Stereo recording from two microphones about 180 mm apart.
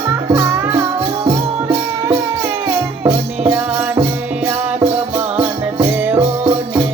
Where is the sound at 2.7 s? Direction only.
10° right (ahead or behind).